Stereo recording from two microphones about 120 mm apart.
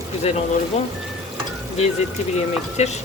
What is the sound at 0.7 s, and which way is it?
Speech, 75° left (ahead or behind).